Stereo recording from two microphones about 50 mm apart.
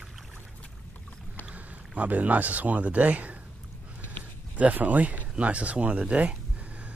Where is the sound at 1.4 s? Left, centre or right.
Right.